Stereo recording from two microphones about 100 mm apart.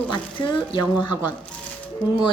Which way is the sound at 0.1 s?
50° left (ahead or behind).